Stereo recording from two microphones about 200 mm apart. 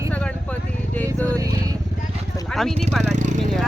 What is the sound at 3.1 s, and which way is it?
Speech, 35° right (ahead or behind).